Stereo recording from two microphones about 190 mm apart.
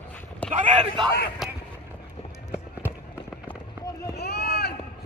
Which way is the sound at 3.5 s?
20° left (ahead or behind).